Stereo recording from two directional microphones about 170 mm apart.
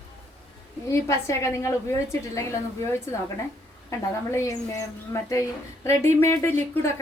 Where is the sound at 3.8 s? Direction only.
15° left (ahead or behind).